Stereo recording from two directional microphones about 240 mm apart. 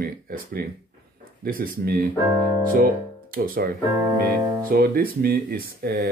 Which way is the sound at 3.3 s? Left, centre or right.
Right.